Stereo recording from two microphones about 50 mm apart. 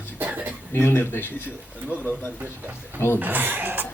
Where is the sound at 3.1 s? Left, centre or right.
Right.